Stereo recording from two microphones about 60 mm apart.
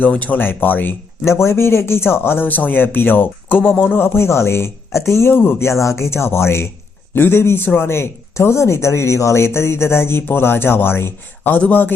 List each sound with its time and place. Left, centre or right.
0.0 s speech: left
1.2 s speech: left
5.8 s speech: left